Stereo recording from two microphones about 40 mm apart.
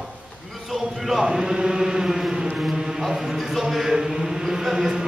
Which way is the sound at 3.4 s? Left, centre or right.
Centre.